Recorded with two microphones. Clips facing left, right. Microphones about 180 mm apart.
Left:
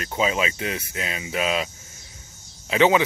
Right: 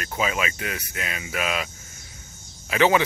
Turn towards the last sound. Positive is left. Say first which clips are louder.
# left 1 dB
turn(degrees=20)  # may be behind; listen again after turning